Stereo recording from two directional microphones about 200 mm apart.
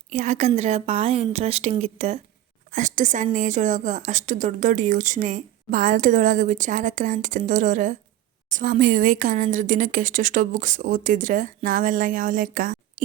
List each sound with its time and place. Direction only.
0.1 s a woman's voice: 35° right (ahead or behind)